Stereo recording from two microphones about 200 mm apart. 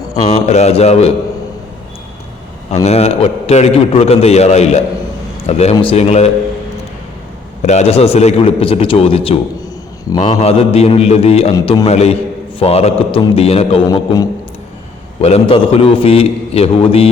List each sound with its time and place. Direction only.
0.3 s a man's voice: 35° left (ahead or behind)
2.8 s a man's voice: 30° left (ahead or behind)
7.6 s a man's voice: 35° left (ahead or behind)